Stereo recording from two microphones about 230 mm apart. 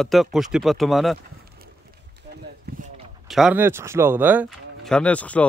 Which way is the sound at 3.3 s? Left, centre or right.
Centre.